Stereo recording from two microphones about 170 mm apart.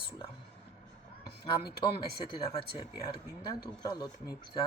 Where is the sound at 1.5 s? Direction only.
25° left (ahead or behind).